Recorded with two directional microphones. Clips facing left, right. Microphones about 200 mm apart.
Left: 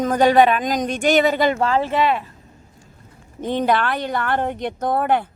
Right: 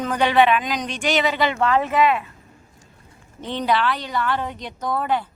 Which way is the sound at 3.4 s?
50° left (ahead or behind).